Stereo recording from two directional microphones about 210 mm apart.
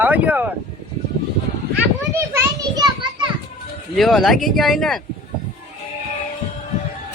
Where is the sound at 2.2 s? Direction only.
15° right (ahead or behind).